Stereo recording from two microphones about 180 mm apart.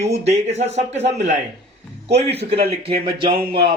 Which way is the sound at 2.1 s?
35° right (ahead or behind).